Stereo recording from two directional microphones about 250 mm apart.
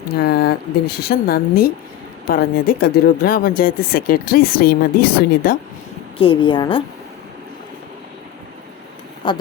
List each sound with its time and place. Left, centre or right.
0.2 s speech: left
6.1 s a woman's voice: left
9.2 s a woman's voice: centre